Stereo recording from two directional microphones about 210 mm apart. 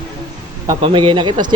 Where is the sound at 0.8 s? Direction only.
25° right (ahead or behind).